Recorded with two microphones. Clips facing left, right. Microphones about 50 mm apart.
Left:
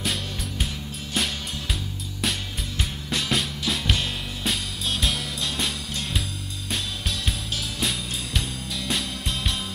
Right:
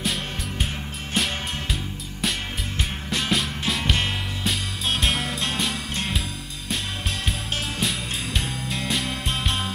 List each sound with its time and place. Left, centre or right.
1.1 s music: centre
3.1 s music: centre
4.8 s music: right
7.8 s music: centre
9.0 s music: right